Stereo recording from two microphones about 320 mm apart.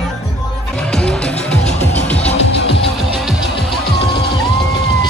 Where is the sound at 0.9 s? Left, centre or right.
Centre.